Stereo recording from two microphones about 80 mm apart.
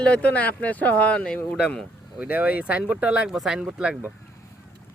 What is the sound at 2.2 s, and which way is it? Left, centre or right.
Speech, centre.